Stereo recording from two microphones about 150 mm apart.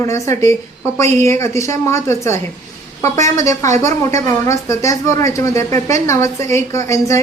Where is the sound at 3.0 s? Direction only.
50° right (ahead or behind).